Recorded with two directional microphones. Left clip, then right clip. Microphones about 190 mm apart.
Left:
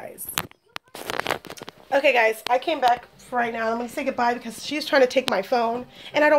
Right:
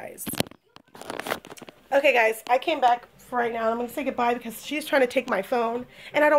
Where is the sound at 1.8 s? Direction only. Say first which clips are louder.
Left 1 dB; 10° right (ahead or behind).